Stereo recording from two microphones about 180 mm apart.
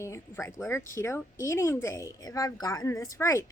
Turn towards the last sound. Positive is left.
turn(degrees=15)  # may be behind; listen again after turning